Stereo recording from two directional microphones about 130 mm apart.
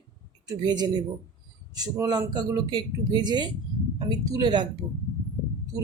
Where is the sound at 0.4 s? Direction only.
35° right (ahead or behind).